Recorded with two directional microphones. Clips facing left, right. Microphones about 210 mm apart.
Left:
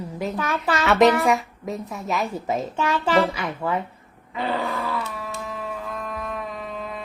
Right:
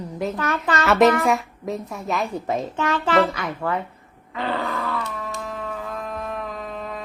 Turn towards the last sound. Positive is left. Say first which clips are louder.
# right 1 dB
turn(degrees=0)  # may be behind; listen again after turning